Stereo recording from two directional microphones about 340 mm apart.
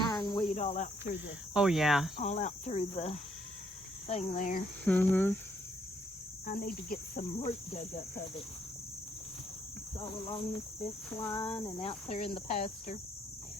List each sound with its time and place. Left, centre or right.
0.1 s cricket: centre
1.5 s speech: centre
2.1 s speech: centre
4.1 s cricket: left
4.9 s speech: centre
6.4 s cricket: left
7.4 s speech: centre
11.1 s speech: centre